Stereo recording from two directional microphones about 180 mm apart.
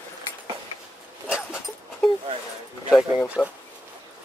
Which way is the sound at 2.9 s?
5° right (ahead or behind).